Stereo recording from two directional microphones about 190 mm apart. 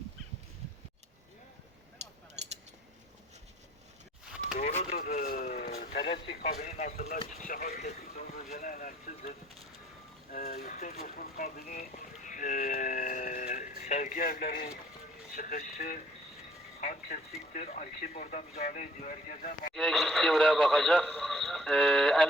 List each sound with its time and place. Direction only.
2.4 s a sound: 35° right (ahead or behind)
4.5 s a sound: 35° left (ahead or behind)
4.9 s speech: 45° left (ahead or behind)
6.0 s speech: 25° left (ahead or behind); by 9.3 s 45° left (ahead or behind)
10.3 s speech: 35° left (ahead or behind)
19.7 s speech: centre (ahead or behind)